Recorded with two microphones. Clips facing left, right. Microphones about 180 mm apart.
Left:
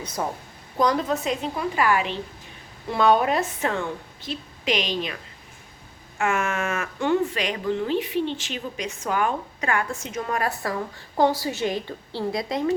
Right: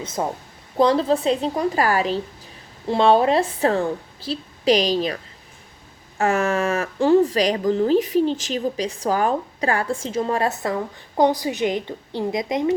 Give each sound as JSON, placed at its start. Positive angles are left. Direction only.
{"t": 0.0, "sound": "a woman's voice", "side_deg": -25}